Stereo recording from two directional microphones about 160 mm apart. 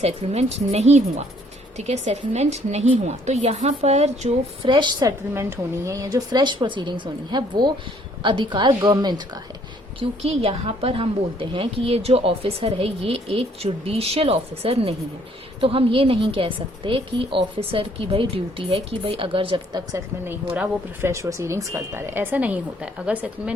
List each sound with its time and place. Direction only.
0.0 s a woman's voice: 40° right (ahead or behind)
4.6 s speech: 30° right (ahead or behind)
5.3 s speech: 15° right (ahead or behind)
10.0 s a woman's voice: 40° right (ahead or behind)
20.2 s speech: 10° right (ahead or behind)